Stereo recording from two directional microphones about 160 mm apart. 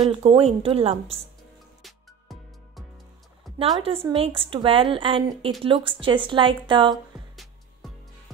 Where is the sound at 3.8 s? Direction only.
35° right (ahead or behind).